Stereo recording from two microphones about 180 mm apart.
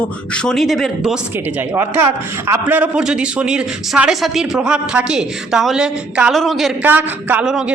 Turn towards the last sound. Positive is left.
turn(degrees=-5)  # may be behind; listen again after turning